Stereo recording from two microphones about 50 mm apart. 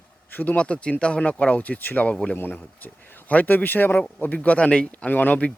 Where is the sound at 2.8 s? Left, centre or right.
Left.